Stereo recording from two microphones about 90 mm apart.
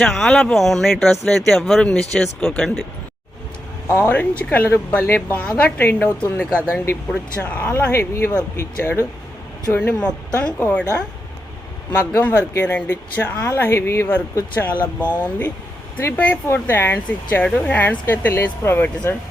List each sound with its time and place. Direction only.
0.0 s speech: 10° left (ahead or behind)
3.8 s a woman's voice: 25° left (ahead or behind)
7.1 s a woman's voice: 15° left (ahead or behind)
11.9 s a woman's voice: 25° left (ahead or behind)